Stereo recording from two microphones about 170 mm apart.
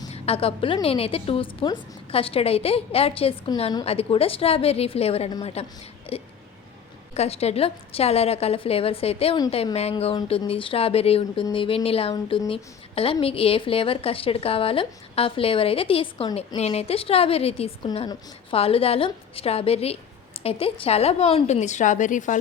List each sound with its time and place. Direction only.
0.1 s a woman's voice: 35° left (ahead or behind)
3.8 s a woman's voice: 35° left (ahead or behind)
6.1 s a sound: 35° left (ahead or behind)
7.1 s a woman's voice: 40° left (ahead or behind)